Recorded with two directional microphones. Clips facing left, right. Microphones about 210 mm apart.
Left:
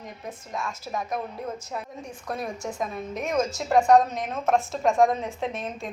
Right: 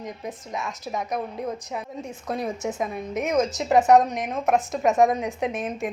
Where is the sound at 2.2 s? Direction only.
20° right (ahead or behind).